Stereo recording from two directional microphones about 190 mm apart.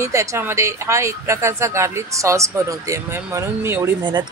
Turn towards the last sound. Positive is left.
turn(degrees=-15)  # may be behind; listen again after turning